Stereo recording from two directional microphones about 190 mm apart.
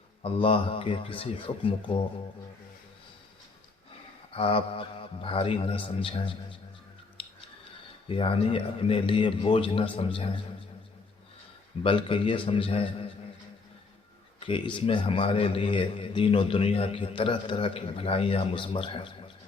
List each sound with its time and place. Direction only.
0.2 s a man's voice: 30° left (ahead or behind)
4.3 s a man's voice: 30° left (ahead or behind)
7.2 s scissors: 30° left (ahead or behind)
8.0 s a man's voice: 30° left (ahead or behind)
11.8 s a man's voice: 25° left (ahead or behind)
14.3 s a man's voice: 30° left (ahead or behind)